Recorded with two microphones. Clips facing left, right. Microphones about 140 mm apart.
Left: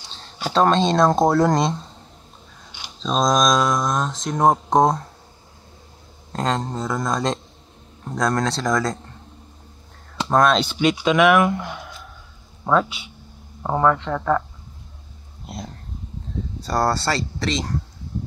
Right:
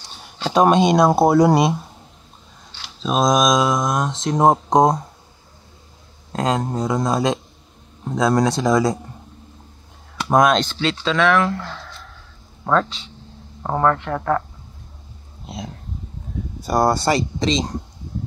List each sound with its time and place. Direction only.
0.5 s speech: 15° right (ahead or behind)
3.0 s speech: 5° right (ahead or behind)
6.3 s speech: 5° right (ahead or behind)
10.2 s speech: 10° right (ahead or behind)
10.5 s speech: 10° left (ahead or behind)
15.4 s speech: centre (ahead or behind)
16.3 s a sound: 10° right (ahead or behind)
16.6 s speech: 15° right (ahead or behind)